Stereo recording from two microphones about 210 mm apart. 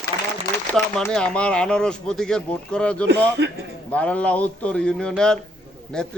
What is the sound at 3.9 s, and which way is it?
A man's voice, 5° left (ahead or behind).